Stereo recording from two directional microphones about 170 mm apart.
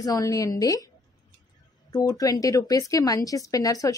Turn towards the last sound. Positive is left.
turn(degrees=20)  # may be behind; listen again after turning